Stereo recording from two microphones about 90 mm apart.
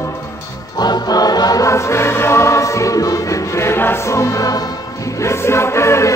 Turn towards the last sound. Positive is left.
turn(degrees=30)  # may be behind; listen again after turning